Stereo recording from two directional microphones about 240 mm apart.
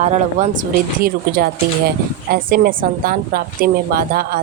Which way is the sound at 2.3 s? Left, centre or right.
Right.